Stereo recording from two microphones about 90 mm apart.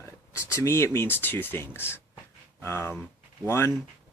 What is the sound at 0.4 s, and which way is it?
Speech, 35° left (ahead or behind).